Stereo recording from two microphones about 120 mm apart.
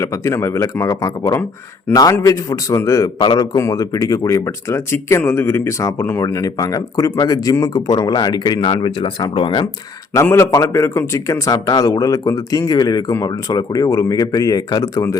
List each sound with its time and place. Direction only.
0.0 s a man's voice: 25° left (ahead or behind); by 9.6 s 45° left (ahead or behind)
10.3 s speech: 25° left (ahead or behind)